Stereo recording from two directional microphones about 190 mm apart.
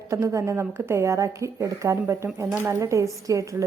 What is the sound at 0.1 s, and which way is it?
A woman's voice, 15° right (ahead or behind).